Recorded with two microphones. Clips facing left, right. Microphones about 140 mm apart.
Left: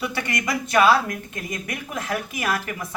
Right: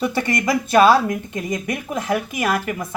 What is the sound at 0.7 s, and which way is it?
A woman's voice, 25° right (ahead or behind).